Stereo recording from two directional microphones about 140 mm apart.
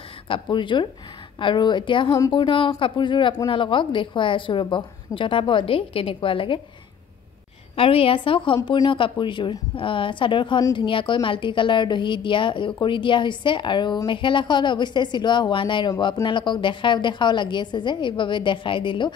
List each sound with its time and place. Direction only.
0.3 s speech: 35° left (ahead or behind)
7.7 s speech: 40° left (ahead or behind)